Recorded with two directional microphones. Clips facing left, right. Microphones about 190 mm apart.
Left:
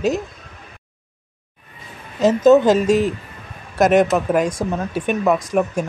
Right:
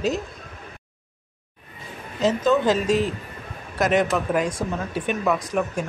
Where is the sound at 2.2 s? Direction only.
45° left (ahead or behind).